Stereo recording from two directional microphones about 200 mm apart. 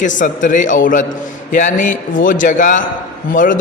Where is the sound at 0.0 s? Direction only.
40° left (ahead or behind).